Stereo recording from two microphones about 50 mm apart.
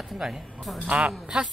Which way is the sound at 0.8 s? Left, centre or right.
Right.